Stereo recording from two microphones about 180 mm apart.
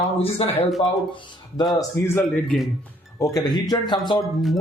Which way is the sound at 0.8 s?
25° left (ahead or behind).